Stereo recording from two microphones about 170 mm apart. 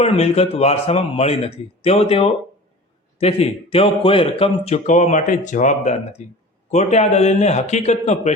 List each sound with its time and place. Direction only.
0.0 s speech: 35° left (ahead or behind)